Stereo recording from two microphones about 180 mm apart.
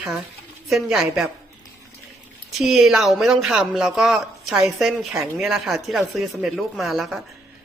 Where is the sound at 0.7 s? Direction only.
Centre (ahead or behind).